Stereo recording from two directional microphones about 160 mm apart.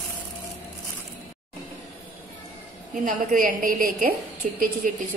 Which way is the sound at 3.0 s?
60° right (ahead or behind).